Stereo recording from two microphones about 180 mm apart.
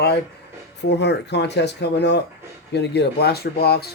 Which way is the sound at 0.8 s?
70° left (ahead or behind).